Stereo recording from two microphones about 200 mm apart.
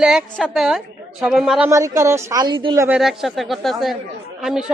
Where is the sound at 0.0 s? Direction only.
5° right (ahead or behind); by 2.8 s 20° right (ahead or behind).